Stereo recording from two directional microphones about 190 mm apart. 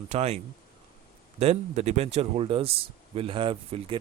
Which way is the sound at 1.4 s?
35° right (ahead or behind).